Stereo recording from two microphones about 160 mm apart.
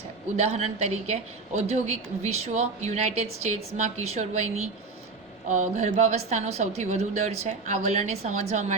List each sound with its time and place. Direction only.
0.3 s a woman's voice: 45° right (ahead or behind)